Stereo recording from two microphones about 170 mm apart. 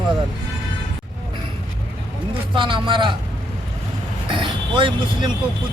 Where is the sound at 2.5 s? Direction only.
30° right (ahead or behind).